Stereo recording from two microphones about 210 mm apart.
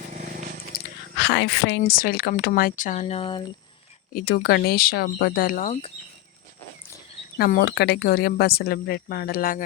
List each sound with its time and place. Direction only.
0.1 s biting: 40° right (ahead or behind)
1.2 s speech: 60° left (ahead or behind); by 3.4 s 25° left (ahead or behind)
4.1 s speech: 45° left (ahead or behind)
7.3 s speech: 50° left (ahead or behind)